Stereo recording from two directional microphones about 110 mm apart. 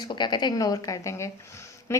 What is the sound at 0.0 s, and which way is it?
A woman's voice, 40° left (ahead or behind).